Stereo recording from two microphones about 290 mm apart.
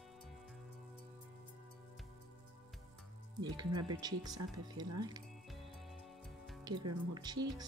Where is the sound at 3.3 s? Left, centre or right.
Centre.